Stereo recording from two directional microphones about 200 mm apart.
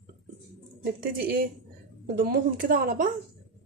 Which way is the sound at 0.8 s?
50° right (ahead or behind).